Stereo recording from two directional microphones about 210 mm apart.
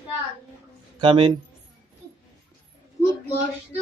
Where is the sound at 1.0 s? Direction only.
25° right (ahead or behind).